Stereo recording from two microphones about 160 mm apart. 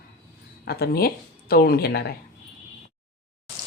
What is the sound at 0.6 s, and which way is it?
Speech, 80° left.